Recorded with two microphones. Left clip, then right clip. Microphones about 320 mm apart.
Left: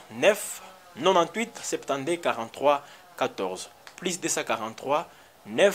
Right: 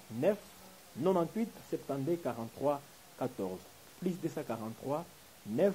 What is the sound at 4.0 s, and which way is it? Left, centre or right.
Speech, centre.